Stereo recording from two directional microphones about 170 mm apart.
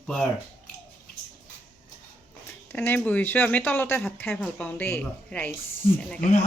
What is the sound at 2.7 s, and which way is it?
Speech, 10° left (ahead or behind).